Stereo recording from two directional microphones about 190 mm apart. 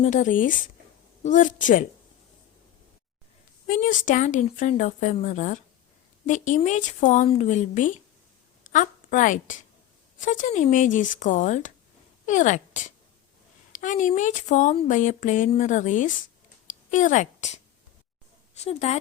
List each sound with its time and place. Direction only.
0.0 s a woman's voice: 40° left (ahead or behind)
3.7 s a woman's voice: 40° left (ahead or behind)
18.6 s speech: 35° left (ahead or behind)